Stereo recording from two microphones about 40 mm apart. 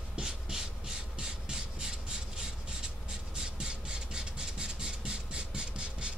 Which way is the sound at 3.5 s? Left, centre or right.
Right.